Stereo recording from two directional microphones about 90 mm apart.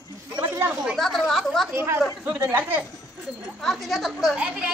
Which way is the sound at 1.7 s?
30° right (ahead or behind).